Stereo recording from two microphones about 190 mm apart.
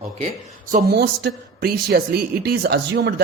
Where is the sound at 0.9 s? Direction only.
55° right (ahead or behind).